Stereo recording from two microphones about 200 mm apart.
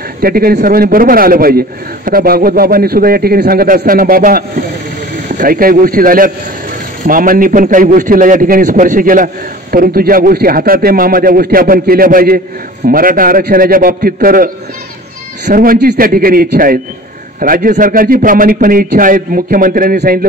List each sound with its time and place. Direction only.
0.2 s a man's voice: 50° right (ahead or behind)